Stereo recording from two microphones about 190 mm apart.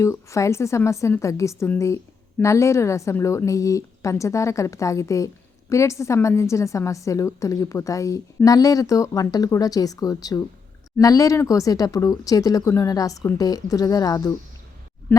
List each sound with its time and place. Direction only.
0.0 s a woman's voice: 15° left (ahead or behind)